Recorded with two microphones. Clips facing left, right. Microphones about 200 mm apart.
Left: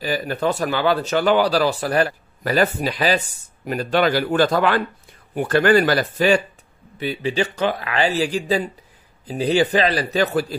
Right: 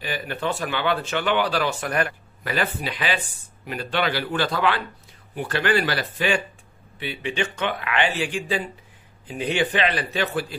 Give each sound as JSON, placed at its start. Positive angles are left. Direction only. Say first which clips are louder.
{"t": 0.0, "sound": "speech", "louder": "left 6 dB", "side_deg": 40}